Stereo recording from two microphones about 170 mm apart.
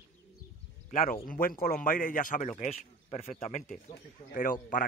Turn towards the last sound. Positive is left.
turn(degrees=55)  # may be behind; listen again after turning